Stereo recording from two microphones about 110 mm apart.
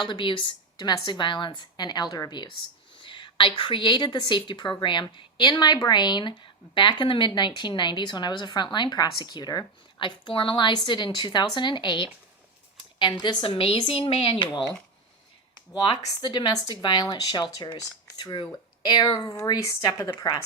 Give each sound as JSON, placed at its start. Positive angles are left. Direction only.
{"t": 0.0, "sound": "a woman's voice", "side_deg": 45}
{"t": 13.4, "sound": "a woman's voice", "side_deg": 60}
{"t": 16.0, "sound": "a woman's voice", "side_deg": 40}